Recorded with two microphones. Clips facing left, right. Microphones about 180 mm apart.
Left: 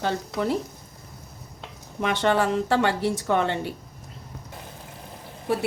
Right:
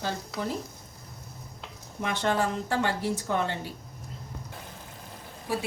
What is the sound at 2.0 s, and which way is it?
A woman's voice, 75° left (ahead or behind).